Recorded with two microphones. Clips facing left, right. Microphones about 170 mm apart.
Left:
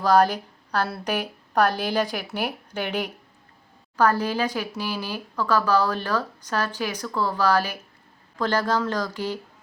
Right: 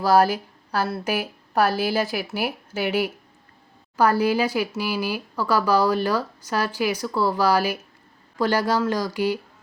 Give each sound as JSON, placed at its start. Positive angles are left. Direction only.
{"t": 0.0, "sound": "speech", "side_deg": -5}